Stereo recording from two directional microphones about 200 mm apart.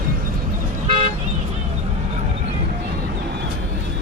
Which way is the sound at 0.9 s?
30° right (ahead or behind).